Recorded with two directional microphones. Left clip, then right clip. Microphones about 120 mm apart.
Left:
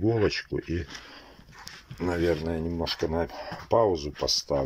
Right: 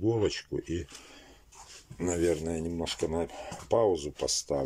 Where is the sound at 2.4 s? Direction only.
10° right (ahead or behind).